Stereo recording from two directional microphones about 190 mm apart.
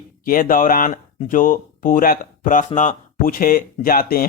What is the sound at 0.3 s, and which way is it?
Speech, 45° left (ahead or behind).